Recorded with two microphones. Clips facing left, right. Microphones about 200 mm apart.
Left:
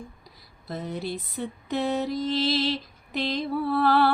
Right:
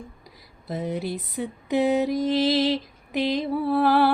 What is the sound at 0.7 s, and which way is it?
Mantra, 15° right (ahead or behind).